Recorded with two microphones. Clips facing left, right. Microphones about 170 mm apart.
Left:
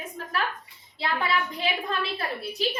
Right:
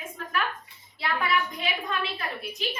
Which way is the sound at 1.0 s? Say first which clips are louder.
Even; 30° left (ahead or behind).